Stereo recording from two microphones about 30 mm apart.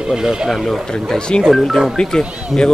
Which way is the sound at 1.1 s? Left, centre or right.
Left.